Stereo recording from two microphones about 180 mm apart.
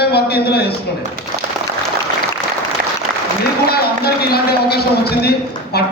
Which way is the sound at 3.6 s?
60° left (ahead or behind).